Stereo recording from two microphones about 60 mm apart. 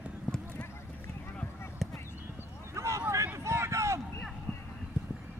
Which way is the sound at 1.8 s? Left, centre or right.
Centre.